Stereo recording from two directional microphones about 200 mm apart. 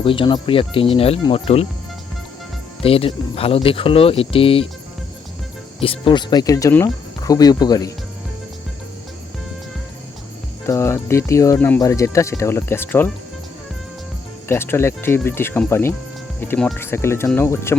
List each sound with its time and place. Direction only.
0.0 s speech: 25° left (ahead or behind)
2.8 s speech: 30° left (ahead or behind)
5.8 s speech: 25° left (ahead or behind)
10.7 s speech: 15° left (ahead or behind)
14.4 s speech: 10° left (ahead or behind)